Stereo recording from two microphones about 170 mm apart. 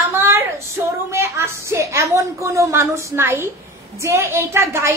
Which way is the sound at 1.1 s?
15° right (ahead or behind).